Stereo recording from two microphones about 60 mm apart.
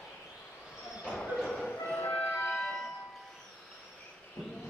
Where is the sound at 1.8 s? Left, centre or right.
Left.